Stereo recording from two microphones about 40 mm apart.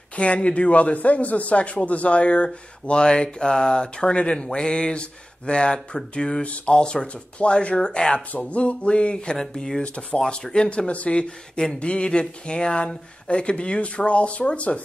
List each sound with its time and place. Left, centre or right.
0.1 s a man's voice: left
6.4 s speech: left
6.7 s a man's voice: left